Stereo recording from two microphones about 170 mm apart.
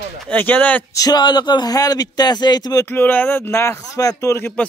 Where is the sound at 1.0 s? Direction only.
25° left (ahead or behind).